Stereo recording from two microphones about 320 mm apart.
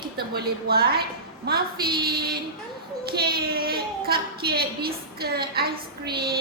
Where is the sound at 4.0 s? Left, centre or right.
Right.